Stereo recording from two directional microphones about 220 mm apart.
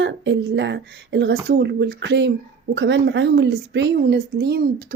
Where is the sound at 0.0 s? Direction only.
55° right (ahead or behind).